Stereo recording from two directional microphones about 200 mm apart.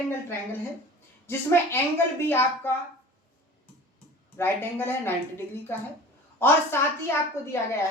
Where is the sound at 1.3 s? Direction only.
10° left (ahead or behind).